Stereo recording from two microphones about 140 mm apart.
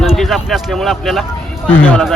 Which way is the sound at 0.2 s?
Centre (ahead or behind).